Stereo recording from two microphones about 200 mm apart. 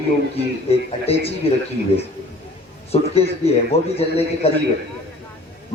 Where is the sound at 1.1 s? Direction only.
30° left (ahead or behind).